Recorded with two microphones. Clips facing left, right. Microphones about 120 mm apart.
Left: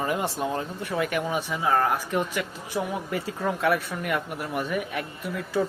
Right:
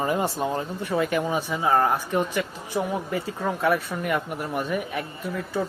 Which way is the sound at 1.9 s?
Centre (ahead or behind).